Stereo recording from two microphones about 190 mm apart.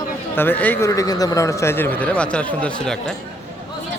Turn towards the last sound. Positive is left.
turn(degrees=5)  # may be behind; listen again after turning